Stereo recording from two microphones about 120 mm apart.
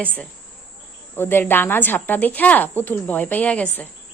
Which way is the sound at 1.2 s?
20° left (ahead or behind).